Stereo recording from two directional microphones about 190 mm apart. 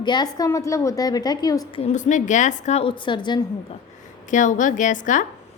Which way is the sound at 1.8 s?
40° left (ahead or behind).